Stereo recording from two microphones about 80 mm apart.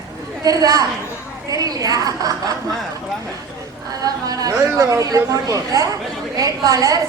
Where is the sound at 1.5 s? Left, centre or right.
Right.